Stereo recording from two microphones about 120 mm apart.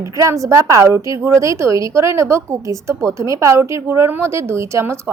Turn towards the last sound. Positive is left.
turn(degrees=-20)  # may be behind; listen again after turning